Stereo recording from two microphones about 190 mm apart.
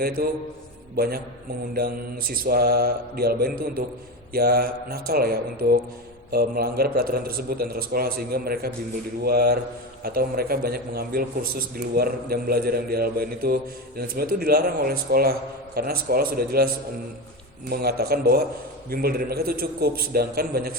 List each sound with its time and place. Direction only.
0.2 s a man's voice: 55° right (ahead or behind)
17.7 s a man's voice: 55° right (ahead or behind)